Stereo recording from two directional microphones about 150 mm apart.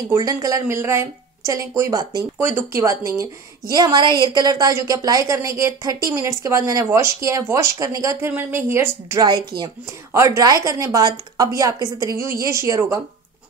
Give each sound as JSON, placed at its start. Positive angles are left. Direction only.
{"t": 0.1, "sound": "a woman's voice", "side_deg": -25}
{"t": 9.5, "sound": "speech", "side_deg": -35}
{"t": 10.1, "sound": "a woman's voice", "side_deg": -20}